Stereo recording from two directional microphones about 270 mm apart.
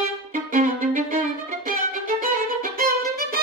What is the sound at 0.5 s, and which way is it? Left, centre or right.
Violin, right.